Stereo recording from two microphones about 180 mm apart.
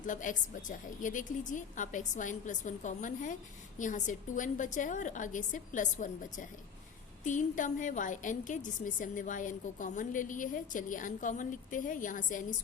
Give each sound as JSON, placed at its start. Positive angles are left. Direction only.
{"t": 0.0, "sound": "a woman's voice", "side_deg": 45}